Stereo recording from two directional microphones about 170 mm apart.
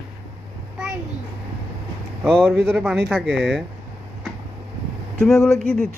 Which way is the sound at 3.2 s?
90° right.